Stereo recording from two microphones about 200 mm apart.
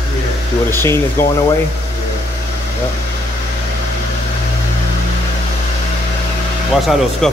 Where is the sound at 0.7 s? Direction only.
10° left (ahead or behind).